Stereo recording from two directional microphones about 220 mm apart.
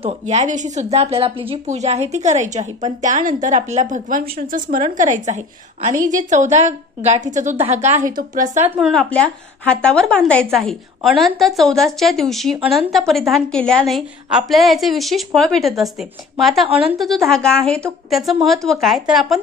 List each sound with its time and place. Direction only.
0.3 s a woman's voice: 35° right (ahead or behind)
8.7 s a woman's voice: centre (ahead or behind)